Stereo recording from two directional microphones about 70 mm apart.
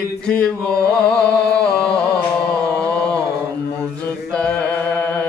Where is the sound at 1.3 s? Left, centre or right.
Centre.